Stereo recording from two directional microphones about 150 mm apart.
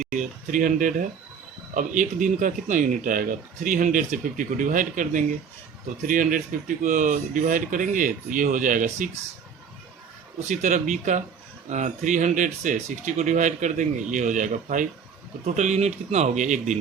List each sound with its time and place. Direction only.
0.0 s speech: 60° right (ahead or behind)
10.5 s speech: 55° right (ahead or behind)